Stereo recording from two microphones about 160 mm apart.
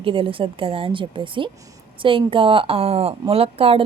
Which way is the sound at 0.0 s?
35° right (ahead or behind).